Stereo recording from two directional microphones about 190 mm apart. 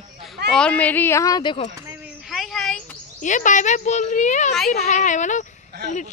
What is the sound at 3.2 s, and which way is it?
A woman's voice, 40° left (ahead or behind).